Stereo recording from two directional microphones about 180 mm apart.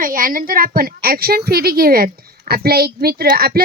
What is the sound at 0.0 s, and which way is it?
A woman's voice, 50° right (ahead or behind).